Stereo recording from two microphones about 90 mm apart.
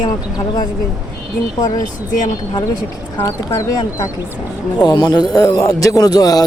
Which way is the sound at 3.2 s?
35° left (ahead or behind).